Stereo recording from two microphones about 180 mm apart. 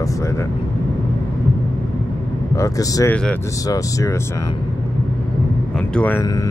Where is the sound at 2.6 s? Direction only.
20° left (ahead or behind).